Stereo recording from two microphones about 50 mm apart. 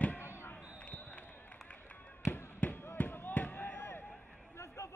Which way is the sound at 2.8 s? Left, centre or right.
Left.